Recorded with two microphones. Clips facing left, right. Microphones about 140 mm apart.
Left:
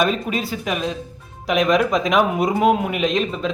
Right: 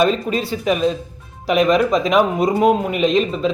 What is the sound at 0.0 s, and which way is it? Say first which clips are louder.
Speech: right 3 dB; 5° left (ahead or behind).